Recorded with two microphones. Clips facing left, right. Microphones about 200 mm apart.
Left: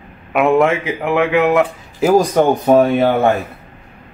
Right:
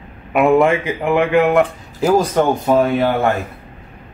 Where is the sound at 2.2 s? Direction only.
15° left (ahead or behind).